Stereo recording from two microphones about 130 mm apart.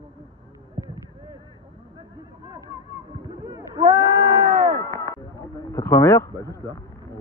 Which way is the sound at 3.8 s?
45° right (ahead or behind).